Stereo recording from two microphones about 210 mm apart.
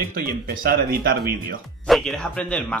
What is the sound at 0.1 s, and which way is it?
Speech, 45° right (ahead or behind).